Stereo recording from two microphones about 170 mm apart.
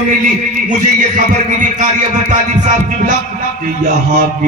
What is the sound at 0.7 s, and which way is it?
A man's voice, 50° right (ahead or behind).